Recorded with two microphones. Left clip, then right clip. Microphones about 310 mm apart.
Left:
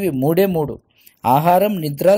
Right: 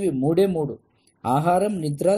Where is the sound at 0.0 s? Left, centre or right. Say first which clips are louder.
Left 4 dB; left.